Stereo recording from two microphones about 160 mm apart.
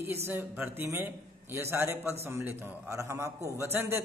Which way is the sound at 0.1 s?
15° right (ahead or behind).